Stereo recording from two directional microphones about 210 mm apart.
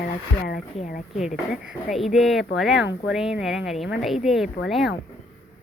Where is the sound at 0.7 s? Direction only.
35° left (ahead or behind).